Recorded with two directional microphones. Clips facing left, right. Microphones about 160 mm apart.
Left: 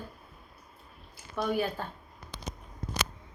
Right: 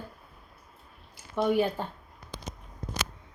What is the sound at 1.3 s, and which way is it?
Speech, 20° right (ahead or behind).